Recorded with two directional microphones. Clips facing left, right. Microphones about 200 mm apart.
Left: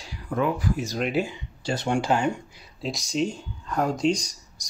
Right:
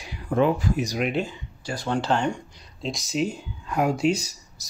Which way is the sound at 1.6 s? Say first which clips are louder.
Left 4 dB; 25° left (ahead or behind).